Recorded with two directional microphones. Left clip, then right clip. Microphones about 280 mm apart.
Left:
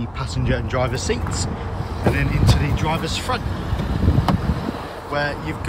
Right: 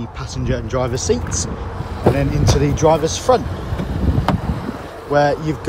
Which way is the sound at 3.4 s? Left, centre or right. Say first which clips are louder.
Right 1 dB; centre.